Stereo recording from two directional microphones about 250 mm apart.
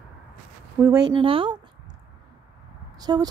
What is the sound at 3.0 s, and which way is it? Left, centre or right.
Speech, centre.